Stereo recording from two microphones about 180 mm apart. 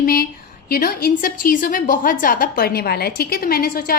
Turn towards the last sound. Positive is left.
turn(degrees=55)  # may be behind; listen again after turning